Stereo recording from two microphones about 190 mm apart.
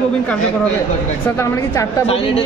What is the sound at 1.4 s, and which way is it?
Speech, 15° left (ahead or behind).